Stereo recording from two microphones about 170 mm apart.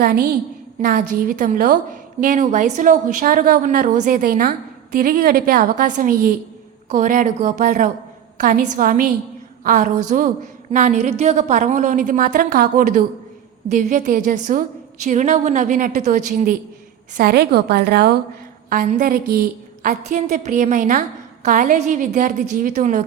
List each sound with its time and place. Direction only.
0.0 s a woman's voice: 65° right (ahead or behind)
0.8 s a woman's voice: 55° right (ahead or behind)
17.2 s a woman's voice: 65° right (ahead or behind)
18.7 s a woman's voice: 60° right (ahead or behind)